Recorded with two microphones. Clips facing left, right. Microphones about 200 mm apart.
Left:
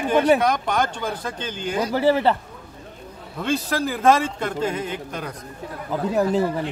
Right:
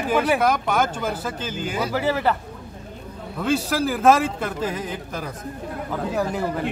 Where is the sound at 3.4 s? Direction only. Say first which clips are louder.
Right 1 dB; centre (ahead or behind).